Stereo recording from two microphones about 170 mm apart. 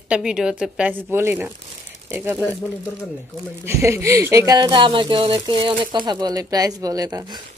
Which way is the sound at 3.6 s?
15° right (ahead or behind).